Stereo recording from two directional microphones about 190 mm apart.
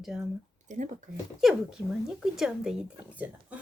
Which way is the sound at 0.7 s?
40° right (ahead or behind).